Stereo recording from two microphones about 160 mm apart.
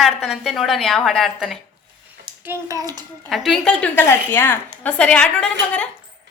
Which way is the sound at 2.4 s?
15° right (ahead or behind).